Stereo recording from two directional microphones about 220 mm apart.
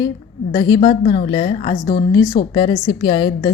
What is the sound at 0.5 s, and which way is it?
A woman's voice, 20° left (ahead or behind).